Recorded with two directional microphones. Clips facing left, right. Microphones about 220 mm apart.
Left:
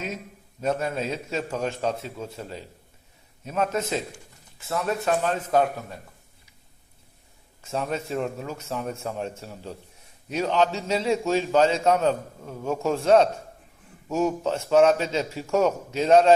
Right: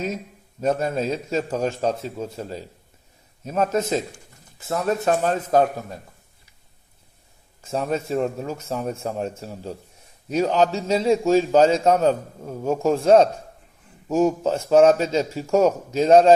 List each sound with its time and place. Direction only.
0.6 s a man's voice: 40° right (ahead or behind)
7.6 s a man's voice: 35° right (ahead or behind)